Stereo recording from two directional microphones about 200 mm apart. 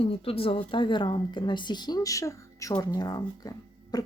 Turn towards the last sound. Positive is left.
turn(degrees=20)  # may be behind; listen again after turning